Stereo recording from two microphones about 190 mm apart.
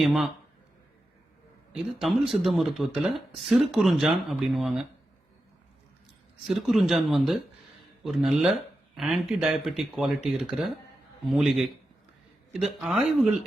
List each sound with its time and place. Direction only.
0.0 s speech: centre (ahead or behind)
1.7 s speech: centre (ahead or behind)
6.5 s speech: centre (ahead or behind)